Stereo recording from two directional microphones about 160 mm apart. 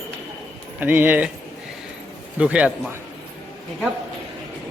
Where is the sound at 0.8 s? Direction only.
10° right (ahead or behind).